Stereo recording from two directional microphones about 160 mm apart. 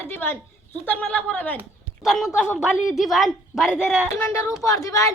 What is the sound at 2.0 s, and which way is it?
A woman's voice, centre (ahead or behind).